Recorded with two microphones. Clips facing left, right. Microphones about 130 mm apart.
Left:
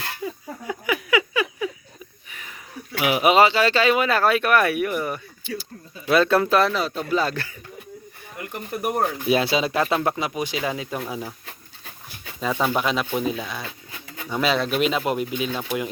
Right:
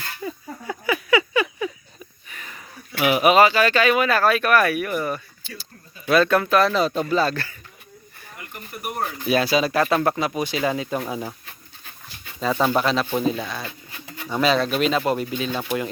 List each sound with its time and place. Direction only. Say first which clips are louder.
0.3 s a sound: right 3 dB; 10° left (ahead or behind)
3.0 s speech: right 1 dB; 20° left (ahead or behind)
6.7 s speech: right 4 dB; 5° left (ahead or behind)
7.1 s speech: right 2 dB; 15° left (ahead or behind)
8.5 s speech: left 5 dB; 25° left (ahead or behind)
10.6 s speech: right 4 dB; centre (ahead or behind)
12.4 s speech: right 2 dB; centre (ahead or behind)
14.4 s speech: right 2 dB; 15° left (ahead or behind)